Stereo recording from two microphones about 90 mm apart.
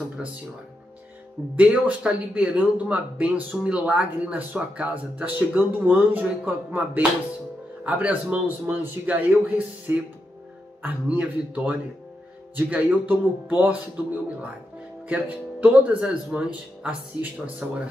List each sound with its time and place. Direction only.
1.6 s speech: 15° right (ahead or behind)
15.0 s speech: 15° right (ahead or behind)